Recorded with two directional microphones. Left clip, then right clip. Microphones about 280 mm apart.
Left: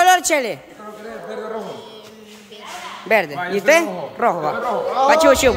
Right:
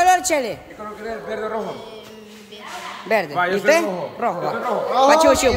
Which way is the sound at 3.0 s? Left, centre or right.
Centre.